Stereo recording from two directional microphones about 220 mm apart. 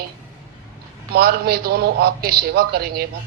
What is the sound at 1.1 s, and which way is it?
A man's voice, 45° right (ahead or behind).